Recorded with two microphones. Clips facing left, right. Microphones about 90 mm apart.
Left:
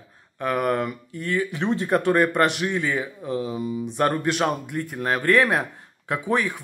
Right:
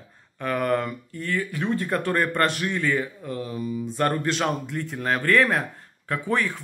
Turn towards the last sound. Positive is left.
turn(degrees=15)  # may be behind; listen again after turning